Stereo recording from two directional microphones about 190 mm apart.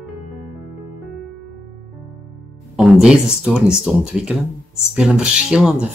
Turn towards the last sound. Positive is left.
turn(degrees=-5)  # may be behind; listen again after turning